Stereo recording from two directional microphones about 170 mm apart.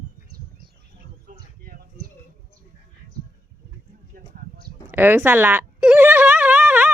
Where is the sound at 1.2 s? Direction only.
60° right (ahead or behind).